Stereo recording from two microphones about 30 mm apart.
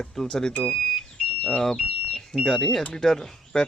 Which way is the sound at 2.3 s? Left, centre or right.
Left.